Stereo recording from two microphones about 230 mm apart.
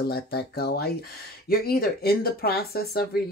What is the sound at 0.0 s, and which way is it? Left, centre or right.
Speech, left.